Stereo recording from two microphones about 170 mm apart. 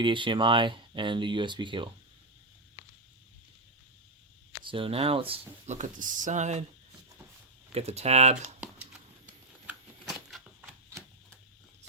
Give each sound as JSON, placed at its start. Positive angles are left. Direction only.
{"t": 0.0, "sound": "speech", "side_deg": -30}
{"t": 4.6, "sound": "speech", "side_deg": -30}
{"t": 7.7, "sound": "speech", "side_deg": -35}
{"t": 8.6, "sound": "a sound", "side_deg": -5}
{"t": 9.6, "sound": "shuffling cards", "side_deg": -5}